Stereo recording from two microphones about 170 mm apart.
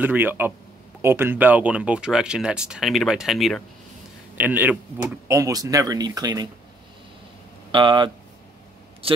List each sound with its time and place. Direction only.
0.0 s speech: 10° right (ahead or behind)
7.7 s speech: 30° right (ahead or behind)